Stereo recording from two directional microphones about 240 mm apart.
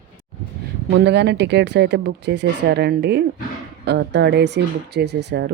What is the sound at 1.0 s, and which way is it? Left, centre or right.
Speech, right.